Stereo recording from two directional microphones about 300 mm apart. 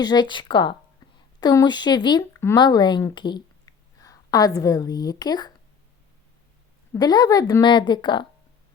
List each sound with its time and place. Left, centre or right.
0.0 s a woman's voice: centre
6.9 s a woman's voice: centre